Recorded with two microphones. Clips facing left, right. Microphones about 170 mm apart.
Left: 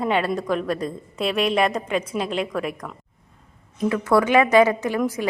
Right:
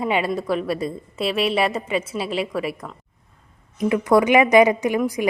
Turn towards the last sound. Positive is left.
turn(degrees=-15)  # may be behind; listen again after turning